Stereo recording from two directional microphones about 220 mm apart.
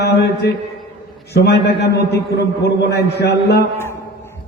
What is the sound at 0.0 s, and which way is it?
A man's voice, 50° left (ahead or behind).